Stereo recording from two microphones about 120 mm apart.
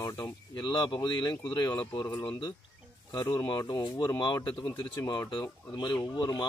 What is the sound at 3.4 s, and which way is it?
Speech, 40° left (ahead or behind).